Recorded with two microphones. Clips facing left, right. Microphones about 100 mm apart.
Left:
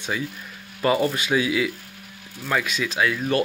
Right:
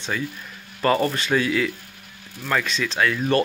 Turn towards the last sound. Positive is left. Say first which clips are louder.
# right 2 dB
turn(degrees=5)  # may be behind; listen again after turning